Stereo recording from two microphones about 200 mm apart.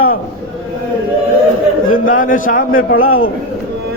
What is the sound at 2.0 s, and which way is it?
Speech, 40° left (ahead or behind).